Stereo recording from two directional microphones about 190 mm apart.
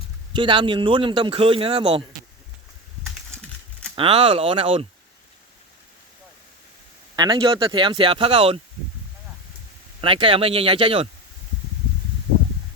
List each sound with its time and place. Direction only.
0.3 s speech: 25° right (ahead or behind)
3.9 s speech: 30° right (ahead or behind)
7.2 s speech: 25° right (ahead or behind)
10.0 s speech: 30° right (ahead or behind)